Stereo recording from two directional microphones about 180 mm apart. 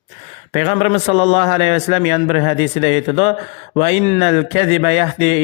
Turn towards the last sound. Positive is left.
turn(degrees=35)  # may be behind; listen again after turning